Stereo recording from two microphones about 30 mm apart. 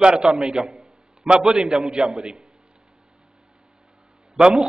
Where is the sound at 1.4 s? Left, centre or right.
Centre.